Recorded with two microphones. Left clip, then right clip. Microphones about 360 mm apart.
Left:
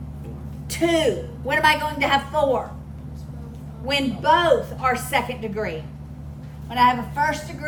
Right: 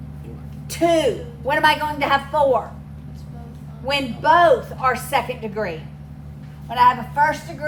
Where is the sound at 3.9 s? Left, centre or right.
Centre.